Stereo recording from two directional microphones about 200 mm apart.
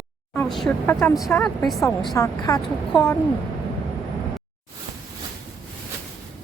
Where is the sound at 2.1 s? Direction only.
15° left (ahead or behind).